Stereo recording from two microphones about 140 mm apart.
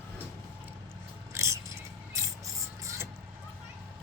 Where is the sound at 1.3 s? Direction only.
20° right (ahead or behind).